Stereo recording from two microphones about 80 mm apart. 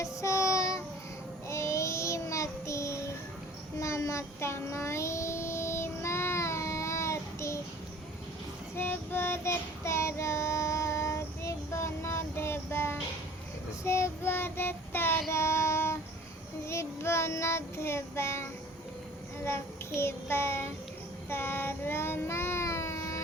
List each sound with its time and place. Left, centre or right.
0.0 s child singing: left
8.7 s child singing: left
19.5 s child singing: left